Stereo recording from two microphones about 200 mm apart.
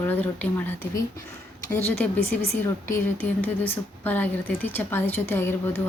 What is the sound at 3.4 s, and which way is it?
A woman's voice, 10° left (ahead or behind).